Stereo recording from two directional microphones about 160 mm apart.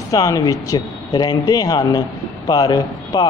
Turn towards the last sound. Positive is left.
turn(degrees=25)  # may be behind; listen again after turning